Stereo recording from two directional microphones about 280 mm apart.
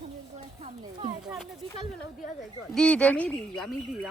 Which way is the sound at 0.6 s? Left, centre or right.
Centre.